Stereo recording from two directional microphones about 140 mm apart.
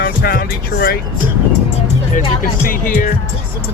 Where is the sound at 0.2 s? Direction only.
90° left.